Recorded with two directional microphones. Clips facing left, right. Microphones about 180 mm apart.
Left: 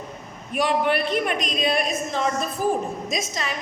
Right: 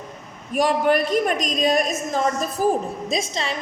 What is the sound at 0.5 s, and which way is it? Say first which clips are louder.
A man's voice: right 3 dB; 45° right (ahead or behind).